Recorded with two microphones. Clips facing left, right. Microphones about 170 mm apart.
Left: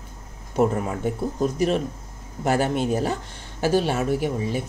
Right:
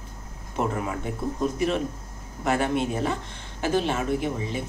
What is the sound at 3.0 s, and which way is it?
Speech, 40° left (ahead or behind).